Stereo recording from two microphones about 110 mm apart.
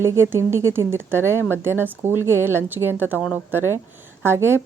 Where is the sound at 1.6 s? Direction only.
20° right (ahead or behind).